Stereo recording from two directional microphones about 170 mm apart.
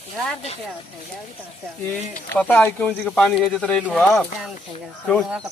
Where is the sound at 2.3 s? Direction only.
10° left (ahead or behind).